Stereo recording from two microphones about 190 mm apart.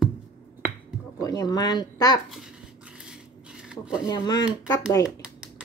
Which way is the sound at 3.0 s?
5° right (ahead or behind).